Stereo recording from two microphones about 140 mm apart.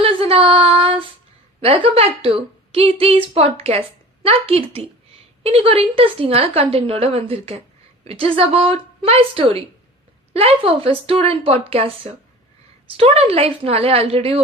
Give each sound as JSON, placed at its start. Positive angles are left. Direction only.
{"t": 0.0, "sound": "female singing", "side_deg": -40}
{"t": 1.6, "sound": "a woman's voice", "side_deg": -45}